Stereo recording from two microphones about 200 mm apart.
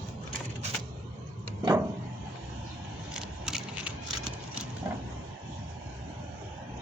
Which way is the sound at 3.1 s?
5° right (ahead or behind).